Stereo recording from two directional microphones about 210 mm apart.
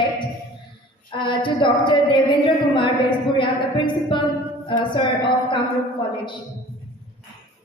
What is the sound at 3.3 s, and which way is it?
A woman's voice, 20° left (ahead or behind).